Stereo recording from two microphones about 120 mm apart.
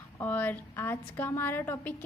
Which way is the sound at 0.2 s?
15° left (ahead or behind).